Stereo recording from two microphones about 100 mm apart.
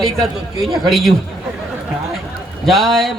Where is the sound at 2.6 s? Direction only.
Centre (ahead or behind).